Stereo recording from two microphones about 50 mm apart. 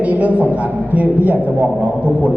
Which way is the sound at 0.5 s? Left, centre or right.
Right.